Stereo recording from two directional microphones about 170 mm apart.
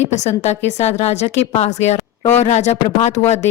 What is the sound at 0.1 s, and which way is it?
A woman's voice, 40° left (ahead or behind).